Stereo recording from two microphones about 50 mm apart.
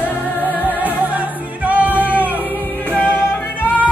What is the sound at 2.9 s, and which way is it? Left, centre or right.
Music, left.